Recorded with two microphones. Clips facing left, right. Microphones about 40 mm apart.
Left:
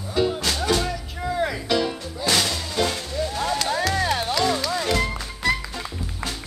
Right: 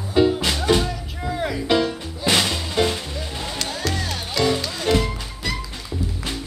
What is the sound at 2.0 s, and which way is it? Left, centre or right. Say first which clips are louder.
Music: right 2 dB; right.